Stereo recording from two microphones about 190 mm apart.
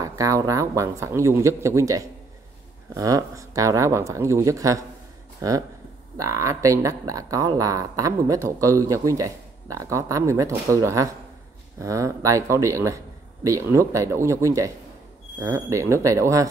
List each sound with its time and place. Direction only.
0.0 s speech: 15° right (ahead or behind)